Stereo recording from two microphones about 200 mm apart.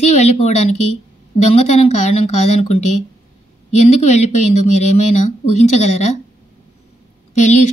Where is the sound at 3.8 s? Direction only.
35° left (ahead or behind).